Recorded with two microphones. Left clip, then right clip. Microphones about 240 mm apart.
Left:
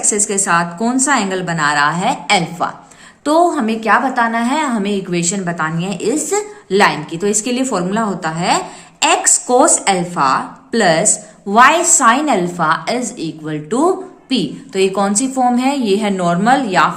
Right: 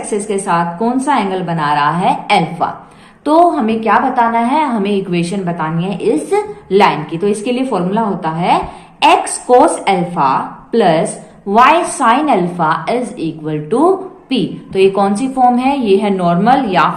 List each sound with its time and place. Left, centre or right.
0.1 s a woman's voice: left